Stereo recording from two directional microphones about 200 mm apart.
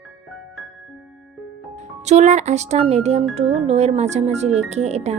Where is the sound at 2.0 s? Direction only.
35° right (ahead or behind).